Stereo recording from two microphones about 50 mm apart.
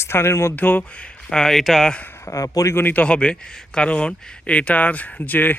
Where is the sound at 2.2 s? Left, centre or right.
Left.